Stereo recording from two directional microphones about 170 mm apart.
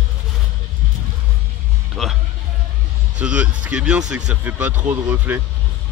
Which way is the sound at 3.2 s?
5° right (ahead or behind).